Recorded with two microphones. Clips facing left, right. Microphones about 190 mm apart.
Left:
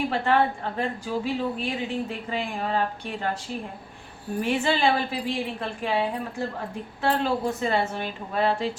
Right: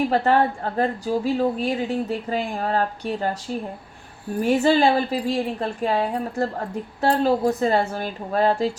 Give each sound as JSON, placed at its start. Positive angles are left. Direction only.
{"t": 0.1, "sound": "a woman's voice", "side_deg": -40}